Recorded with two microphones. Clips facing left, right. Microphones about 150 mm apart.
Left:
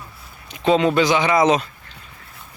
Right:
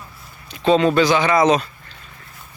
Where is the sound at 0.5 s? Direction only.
15° left (ahead or behind).